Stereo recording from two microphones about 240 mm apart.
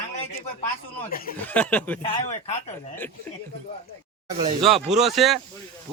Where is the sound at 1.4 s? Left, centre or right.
Centre.